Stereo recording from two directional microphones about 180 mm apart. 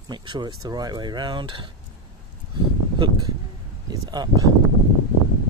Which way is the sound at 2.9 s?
25° right (ahead or behind).